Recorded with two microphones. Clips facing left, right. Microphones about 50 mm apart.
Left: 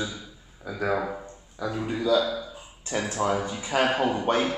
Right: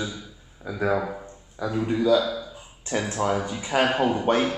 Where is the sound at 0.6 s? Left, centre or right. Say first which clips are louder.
Right 2 dB; right.